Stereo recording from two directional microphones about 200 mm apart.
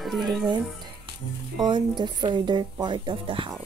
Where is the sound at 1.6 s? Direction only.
25° right (ahead or behind).